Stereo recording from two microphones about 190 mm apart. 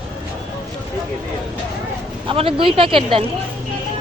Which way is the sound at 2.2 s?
30° right (ahead or behind).